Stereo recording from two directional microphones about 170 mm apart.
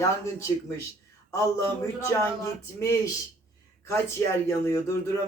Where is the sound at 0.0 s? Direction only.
15° left (ahead or behind).